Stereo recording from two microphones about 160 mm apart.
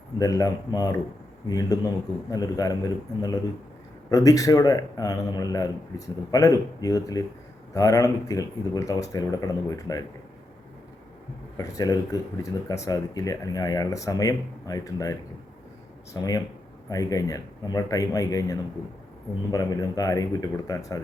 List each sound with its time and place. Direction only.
0.2 s speech: 20° left (ahead or behind)
11.5 s speech: 20° left (ahead or behind)
16.1 s speech: 25° left (ahead or behind)